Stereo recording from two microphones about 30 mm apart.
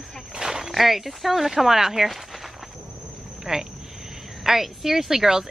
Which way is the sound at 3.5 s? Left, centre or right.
Centre.